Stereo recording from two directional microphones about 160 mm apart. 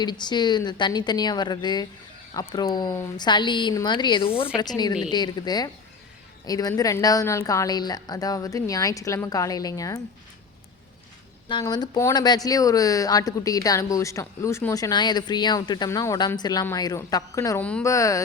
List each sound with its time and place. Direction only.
0.0 s a woman's voice: 25° left (ahead or behind)
11.6 s a woman's voice: 20° left (ahead or behind)
17.6 s speech: 10° left (ahead or behind)
17.8 s a woman's voice: 20° left (ahead or behind)